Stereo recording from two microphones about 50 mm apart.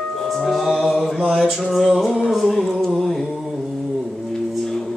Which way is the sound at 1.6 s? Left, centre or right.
Centre.